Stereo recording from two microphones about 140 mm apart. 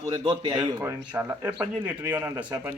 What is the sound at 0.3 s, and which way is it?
A man's voice, 30° right (ahead or behind).